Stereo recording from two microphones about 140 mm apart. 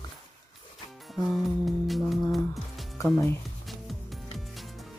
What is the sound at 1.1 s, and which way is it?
Music, centre (ahead or behind).